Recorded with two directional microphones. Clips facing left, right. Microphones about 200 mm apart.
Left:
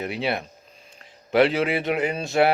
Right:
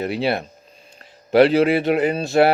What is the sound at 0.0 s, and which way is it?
Speech, 35° right (ahead or behind).